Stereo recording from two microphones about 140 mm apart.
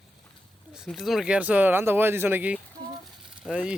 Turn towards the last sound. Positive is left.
turn(degrees=-5)  # may be behind; listen again after turning